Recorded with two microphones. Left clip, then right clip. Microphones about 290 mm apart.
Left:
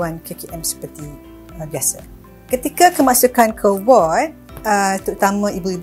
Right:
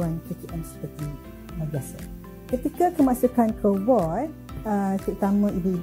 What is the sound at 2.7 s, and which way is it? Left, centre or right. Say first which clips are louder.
Speech: left 10 dB; centre.